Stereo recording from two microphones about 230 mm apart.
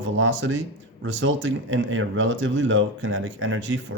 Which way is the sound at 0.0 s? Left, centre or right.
Right.